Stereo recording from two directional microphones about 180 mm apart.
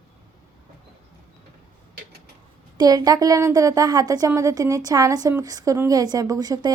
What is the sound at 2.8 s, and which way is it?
A woman's voice, 20° right (ahead or behind).